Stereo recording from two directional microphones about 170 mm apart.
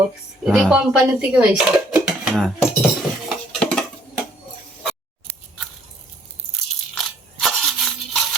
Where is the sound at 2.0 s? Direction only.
Centre (ahead or behind).